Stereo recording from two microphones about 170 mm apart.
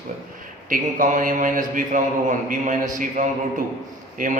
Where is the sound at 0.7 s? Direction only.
50° right (ahead or behind).